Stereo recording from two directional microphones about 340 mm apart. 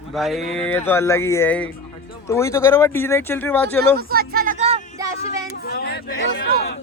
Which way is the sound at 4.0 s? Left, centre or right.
Right.